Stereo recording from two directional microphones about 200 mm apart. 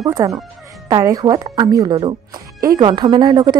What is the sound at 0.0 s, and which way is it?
Speech, 15° right (ahead or behind).